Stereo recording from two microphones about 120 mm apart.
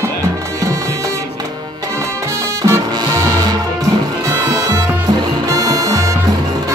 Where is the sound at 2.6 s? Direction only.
30° right (ahead or behind).